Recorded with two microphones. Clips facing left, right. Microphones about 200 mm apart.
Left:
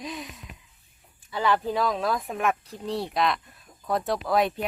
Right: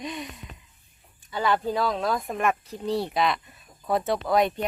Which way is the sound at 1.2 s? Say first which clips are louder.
Even; centre (ahead or behind).